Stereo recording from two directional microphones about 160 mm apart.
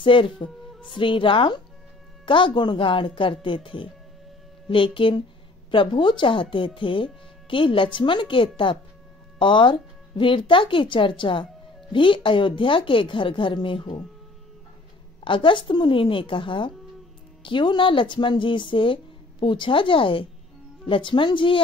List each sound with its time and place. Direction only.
0.0 s speech: 30° left (ahead or behind)
15.2 s speech: 30° left (ahead or behind)